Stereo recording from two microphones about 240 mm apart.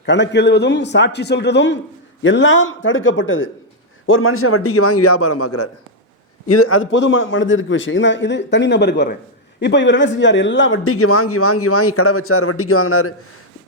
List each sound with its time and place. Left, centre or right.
0.0 s a man's voice: left